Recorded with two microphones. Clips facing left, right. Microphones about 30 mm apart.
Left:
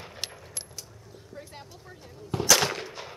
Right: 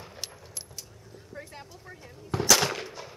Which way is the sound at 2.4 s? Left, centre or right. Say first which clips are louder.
Even; centre.